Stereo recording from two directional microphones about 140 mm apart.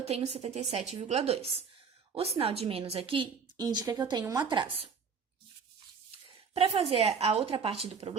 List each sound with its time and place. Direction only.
0.0 s a woman's voice: 50° right (ahead or behind)
6.5 s a woman's voice: 45° right (ahead or behind)